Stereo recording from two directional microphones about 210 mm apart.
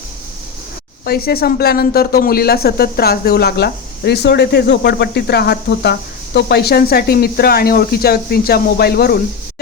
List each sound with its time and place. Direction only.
1.0 s speech: 45° left (ahead or behind)